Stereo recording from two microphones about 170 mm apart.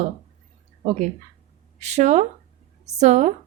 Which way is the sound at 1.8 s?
40° right (ahead or behind).